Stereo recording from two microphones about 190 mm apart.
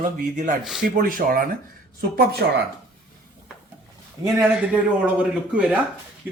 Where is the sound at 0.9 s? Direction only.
45° right (ahead or behind).